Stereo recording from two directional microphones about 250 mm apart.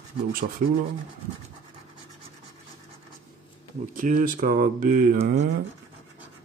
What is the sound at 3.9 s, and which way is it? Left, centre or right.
Speech, right.